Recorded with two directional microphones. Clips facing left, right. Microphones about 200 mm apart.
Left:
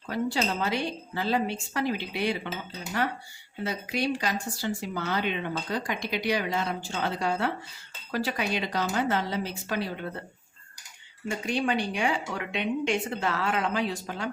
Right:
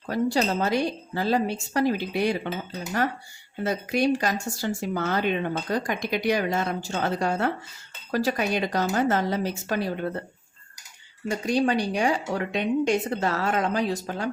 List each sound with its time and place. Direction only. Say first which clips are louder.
0.1 s speech: right 4 dB; 40° right (ahead or behind)
3.6 s speech: right 6 dB; 45° right (ahead or behind)
11.3 s a woman's voice: right 5 dB; 40° right (ahead or behind)